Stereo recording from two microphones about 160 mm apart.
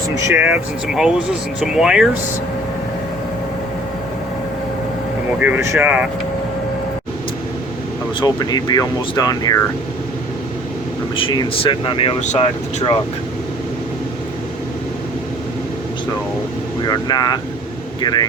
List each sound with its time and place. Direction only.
0.1 s speech: 15° right (ahead or behind)
5.4 s speech: 10° right (ahead or behind)
8.2 s speech: 25° left (ahead or behind)
11.2 s speech: 35° left (ahead or behind)
12.2 s speech: 45° left (ahead or behind)
16.8 s speech: 25° left (ahead or behind)